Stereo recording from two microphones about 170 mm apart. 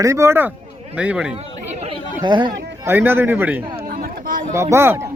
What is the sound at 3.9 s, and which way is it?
Chatter, 55° right (ahead or behind).